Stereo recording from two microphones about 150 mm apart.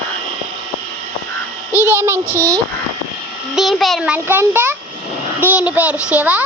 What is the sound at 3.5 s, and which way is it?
A child's voice, centre (ahead or behind).